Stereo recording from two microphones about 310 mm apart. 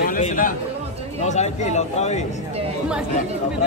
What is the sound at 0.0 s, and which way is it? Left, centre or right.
Chatter, left.